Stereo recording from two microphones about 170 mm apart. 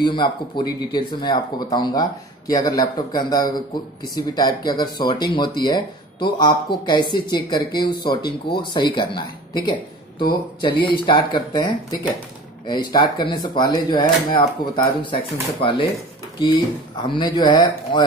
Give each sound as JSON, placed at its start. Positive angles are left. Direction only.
{"t": 0.0, "sound": "speech", "side_deg": 25}
{"t": 16.3, "sound": "speech", "side_deg": 30}